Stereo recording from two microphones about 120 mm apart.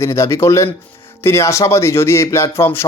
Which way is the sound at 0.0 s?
25° left (ahead or behind).